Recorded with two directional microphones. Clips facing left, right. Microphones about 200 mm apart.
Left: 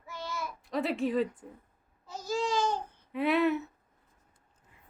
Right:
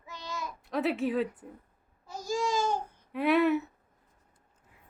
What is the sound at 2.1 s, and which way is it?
Babbling, 15° right (ahead or behind).